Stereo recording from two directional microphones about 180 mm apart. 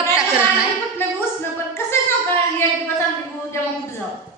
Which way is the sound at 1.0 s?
15° left (ahead or behind).